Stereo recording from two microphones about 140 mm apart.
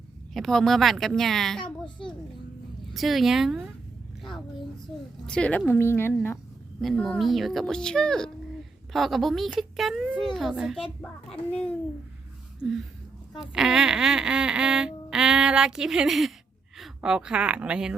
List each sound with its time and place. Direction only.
0.3 s speech: centre (ahead or behind)
2.9 s a child's voice: centre (ahead or behind); by 6.1 s 15° left (ahead or behind)
6.8 s speech: 5° left (ahead or behind)
11.5 s speech: 10° left (ahead or behind)
13.4 s speech: 5° right (ahead or behind)